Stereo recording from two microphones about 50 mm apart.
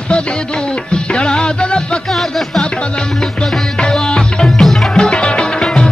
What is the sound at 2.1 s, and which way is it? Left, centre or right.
Music, centre.